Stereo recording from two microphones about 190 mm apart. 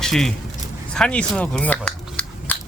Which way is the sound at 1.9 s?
5° left (ahead or behind).